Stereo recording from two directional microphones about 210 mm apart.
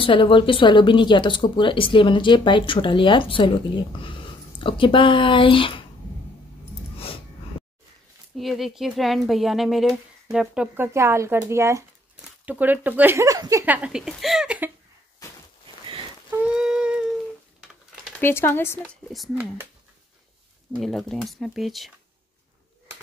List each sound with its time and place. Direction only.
0.0 s a woman's voice: 25° left (ahead or behind)
8.4 s speech: centre (ahead or behind)
16.3 s a sound: 5° right (ahead or behind)
18.2 s speech: 10° left (ahead or behind)
19.1 s speech: centre (ahead or behind)
20.8 s speech: centre (ahead or behind)